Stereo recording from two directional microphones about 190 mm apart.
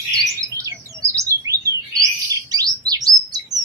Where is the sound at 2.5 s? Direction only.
20° right (ahead or behind).